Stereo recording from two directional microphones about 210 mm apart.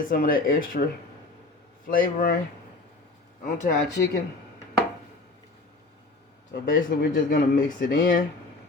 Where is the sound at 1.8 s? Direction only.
40° left (ahead or behind).